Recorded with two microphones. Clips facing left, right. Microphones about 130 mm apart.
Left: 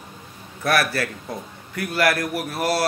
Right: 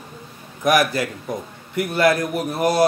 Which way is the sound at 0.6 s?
15° right (ahead or behind).